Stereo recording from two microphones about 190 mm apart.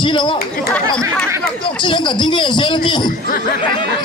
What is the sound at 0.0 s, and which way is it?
Speech, 25° left (ahead or behind).